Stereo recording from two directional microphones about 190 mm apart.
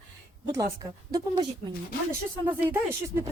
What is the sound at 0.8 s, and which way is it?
Speech, 20° right (ahead or behind).